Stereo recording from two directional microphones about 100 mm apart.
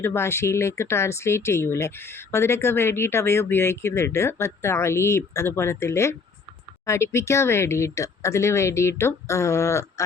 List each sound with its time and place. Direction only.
0.0 s speech: 25° left (ahead or behind)